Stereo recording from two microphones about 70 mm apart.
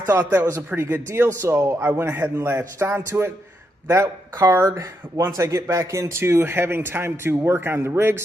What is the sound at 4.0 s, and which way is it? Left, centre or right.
Speech, right.